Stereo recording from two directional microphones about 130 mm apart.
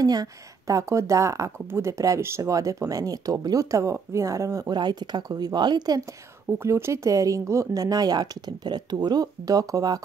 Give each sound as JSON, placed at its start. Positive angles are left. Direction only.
{"t": 0.0, "sound": "speech", "side_deg": -30}